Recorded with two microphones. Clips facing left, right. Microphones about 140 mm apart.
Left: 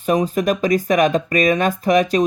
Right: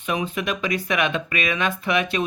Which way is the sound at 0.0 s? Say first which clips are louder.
Left 8 dB; 40° left (ahead or behind).